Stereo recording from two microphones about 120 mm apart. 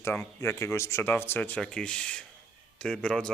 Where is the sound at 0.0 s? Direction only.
20° left (ahead or behind).